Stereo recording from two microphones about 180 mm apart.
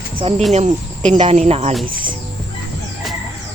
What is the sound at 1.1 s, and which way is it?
Speech, 35° right (ahead or behind).